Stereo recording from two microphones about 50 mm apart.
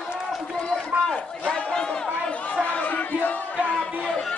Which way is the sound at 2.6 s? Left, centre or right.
Left.